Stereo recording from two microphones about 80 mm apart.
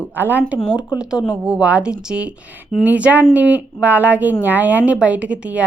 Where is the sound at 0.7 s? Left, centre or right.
Centre.